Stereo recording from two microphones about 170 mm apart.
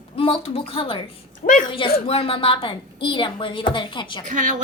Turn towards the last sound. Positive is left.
turn(degrees=-50)  # may be behind; listen again after turning